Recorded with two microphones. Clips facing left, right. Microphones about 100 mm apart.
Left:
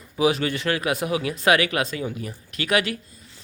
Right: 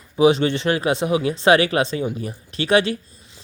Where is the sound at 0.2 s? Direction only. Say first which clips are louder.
Right 6 dB; 25° right (ahead or behind).